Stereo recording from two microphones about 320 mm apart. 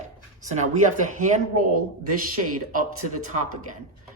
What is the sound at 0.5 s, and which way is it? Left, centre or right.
Speech, right.